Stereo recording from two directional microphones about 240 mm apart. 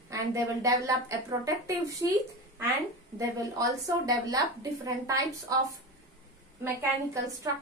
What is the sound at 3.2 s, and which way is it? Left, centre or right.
A woman's voice, centre.